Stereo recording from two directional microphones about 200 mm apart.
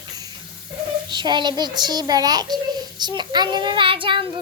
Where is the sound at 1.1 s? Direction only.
25° right (ahead or behind).